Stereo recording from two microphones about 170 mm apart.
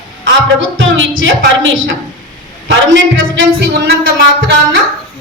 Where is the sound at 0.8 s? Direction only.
90° right.